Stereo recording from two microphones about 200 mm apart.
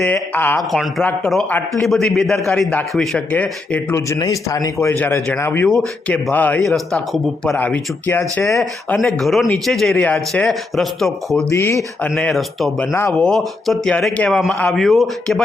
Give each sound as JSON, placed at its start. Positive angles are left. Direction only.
{"t": 0.0, "sound": "speech", "side_deg": 10}
{"t": 8.5, "sound": "speech", "side_deg": 0}
{"t": 11.5, "sound": "speech", "side_deg": 15}
{"t": 11.8, "sound": "speech", "side_deg": 5}